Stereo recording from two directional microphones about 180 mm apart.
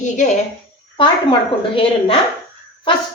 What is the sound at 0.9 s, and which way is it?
A woman's voice, 25° left (ahead or behind).